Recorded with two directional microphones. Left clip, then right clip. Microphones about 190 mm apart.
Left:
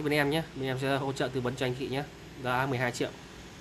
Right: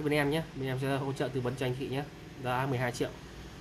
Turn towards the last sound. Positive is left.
turn(degrees=10)  # may be behind; listen again after turning